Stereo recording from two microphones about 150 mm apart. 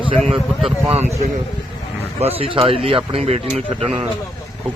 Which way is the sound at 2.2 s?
40° right (ahead or behind).